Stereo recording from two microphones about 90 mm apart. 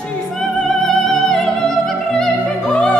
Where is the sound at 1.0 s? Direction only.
5° left (ahead or behind).